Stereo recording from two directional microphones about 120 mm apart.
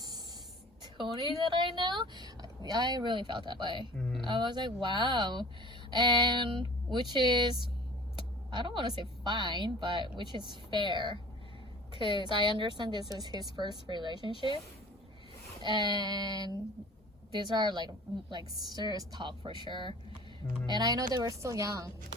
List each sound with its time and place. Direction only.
0.9 s a woman's voice: 40° right (ahead or behind)
3.9 s speech: 5° left (ahead or behind)
4.3 s a woman's voice: 40° right (ahead or behind)
15.6 s a woman's voice: 35° right (ahead or behind)